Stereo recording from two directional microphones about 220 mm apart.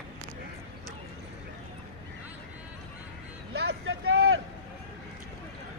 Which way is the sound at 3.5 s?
50° right (ahead or behind).